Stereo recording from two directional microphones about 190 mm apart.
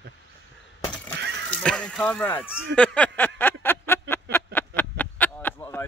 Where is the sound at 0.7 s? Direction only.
15° left (ahead or behind).